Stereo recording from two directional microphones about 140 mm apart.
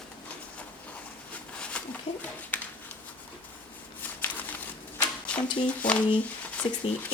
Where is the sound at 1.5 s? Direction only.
10° left (ahead or behind).